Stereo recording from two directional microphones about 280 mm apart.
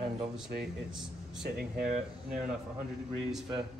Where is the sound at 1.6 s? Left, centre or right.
Right.